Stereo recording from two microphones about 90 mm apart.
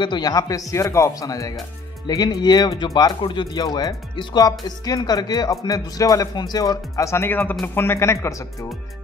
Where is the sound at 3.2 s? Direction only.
60° left (ahead or behind); by 7.3 s 35° left (ahead or behind).